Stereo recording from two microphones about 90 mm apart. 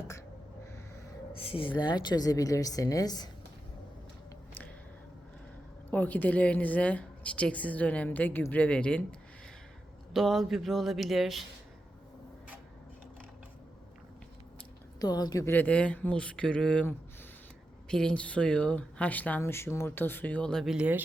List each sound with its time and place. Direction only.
1.3 s a woman's voice: 90° left; by 3.2 s 45° left (ahead or behind)
5.9 s a woman's voice: 20° left (ahead or behind)
10.1 s speech: centre (ahead or behind)
15.0 s a woman's voice: 45° left (ahead or behind)
15.4 s a woman's voice: 20° left (ahead or behind)
17.8 s a woman's voice: 10° left (ahead or behind)
19.4 s speech: 30° left (ahead or behind); by 20.7 s 10° left (ahead or behind)
20.7 s speech: 15° right (ahead or behind)